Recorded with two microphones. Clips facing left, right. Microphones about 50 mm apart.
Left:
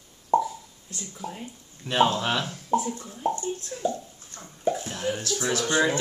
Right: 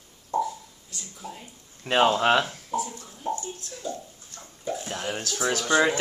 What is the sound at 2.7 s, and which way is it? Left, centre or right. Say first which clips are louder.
Speech: left 9 dB; left.